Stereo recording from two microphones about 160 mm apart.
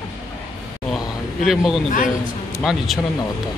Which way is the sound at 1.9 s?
55° left (ahead or behind).